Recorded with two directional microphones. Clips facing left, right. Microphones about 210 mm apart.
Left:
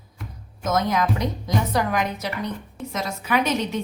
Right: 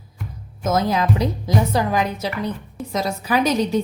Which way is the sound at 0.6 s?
30° right (ahead or behind).